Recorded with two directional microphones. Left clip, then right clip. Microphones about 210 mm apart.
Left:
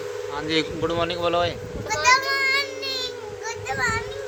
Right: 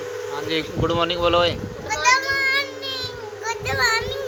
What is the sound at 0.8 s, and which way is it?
Speech, 5° right (ahead or behind).